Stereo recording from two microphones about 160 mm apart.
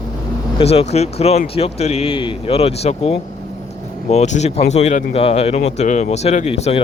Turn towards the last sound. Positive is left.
turn(degrees=40)  # may be behind; listen again after turning